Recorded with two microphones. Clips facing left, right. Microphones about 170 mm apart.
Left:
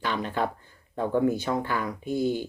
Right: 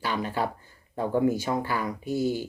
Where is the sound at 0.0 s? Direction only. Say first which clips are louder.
Even; 10° right (ahead or behind).